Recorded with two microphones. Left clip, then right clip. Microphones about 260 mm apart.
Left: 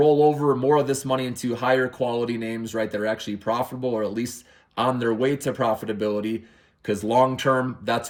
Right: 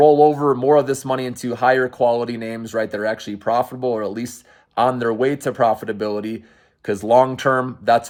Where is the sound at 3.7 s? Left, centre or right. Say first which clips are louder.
Right 4 dB; centre.